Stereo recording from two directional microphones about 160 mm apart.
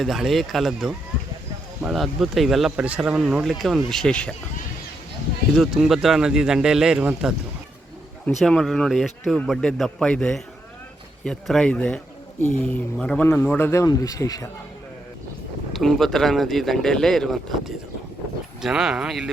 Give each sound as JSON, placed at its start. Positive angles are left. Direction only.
{"t": 0.0, "sound": "speech", "side_deg": 0}
{"t": 5.5, "sound": "speech", "side_deg": 0}
{"t": 15.7, "sound": "speech", "side_deg": 0}